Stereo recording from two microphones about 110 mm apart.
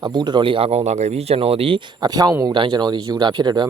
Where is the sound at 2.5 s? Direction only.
45° right (ahead or behind).